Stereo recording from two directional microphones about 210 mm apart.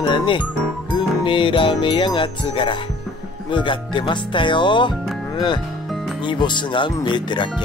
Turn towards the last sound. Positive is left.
turn(degrees=20)  # may be behind; listen again after turning